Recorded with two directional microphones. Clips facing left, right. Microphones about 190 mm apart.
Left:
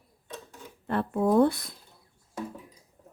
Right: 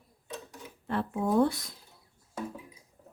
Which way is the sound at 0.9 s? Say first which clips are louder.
Left 4 dB; 55° left (ahead or behind).